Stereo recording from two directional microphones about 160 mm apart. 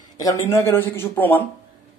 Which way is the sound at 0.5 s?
15° left (ahead or behind).